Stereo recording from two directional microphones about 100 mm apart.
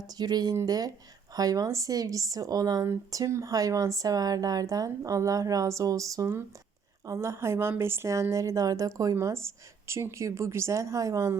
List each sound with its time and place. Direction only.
0.2 s a woman's voice: 40° right (ahead or behind)